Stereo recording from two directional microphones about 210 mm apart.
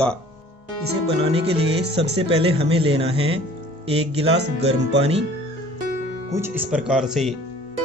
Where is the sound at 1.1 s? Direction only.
30° right (ahead or behind).